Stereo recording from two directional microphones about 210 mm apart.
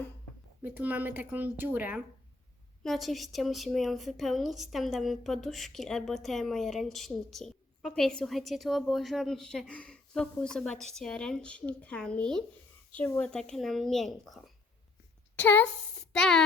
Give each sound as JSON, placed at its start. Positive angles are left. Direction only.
{"t": 0.6, "sound": "speech", "side_deg": -10}